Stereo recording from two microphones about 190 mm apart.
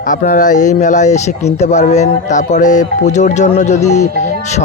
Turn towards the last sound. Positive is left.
turn(degrees=35)  # may be behind; listen again after turning